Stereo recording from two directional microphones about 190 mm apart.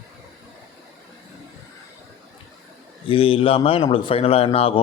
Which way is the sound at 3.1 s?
30° left (ahead or behind).